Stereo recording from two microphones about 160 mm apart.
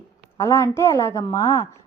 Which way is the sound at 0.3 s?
15° left (ahead or behind).